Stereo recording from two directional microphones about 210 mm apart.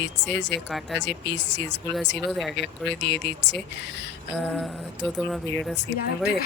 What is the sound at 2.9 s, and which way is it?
Speech, 55° left (ahead or behind).